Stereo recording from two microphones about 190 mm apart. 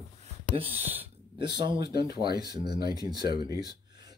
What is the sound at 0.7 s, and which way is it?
Speech, 10° right (ahead or behind).